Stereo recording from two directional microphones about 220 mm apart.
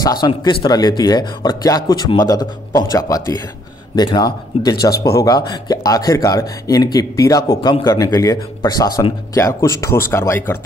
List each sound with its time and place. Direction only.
0.0 s speech: 20° left (ahead or behind)